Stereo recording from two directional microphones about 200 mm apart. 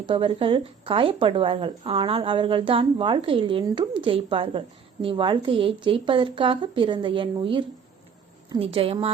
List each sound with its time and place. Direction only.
0.0 s speech: 25° right (ahead or behind)